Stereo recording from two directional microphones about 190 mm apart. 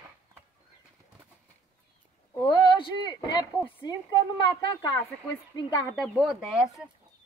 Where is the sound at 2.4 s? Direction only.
25° left (ahead or behind).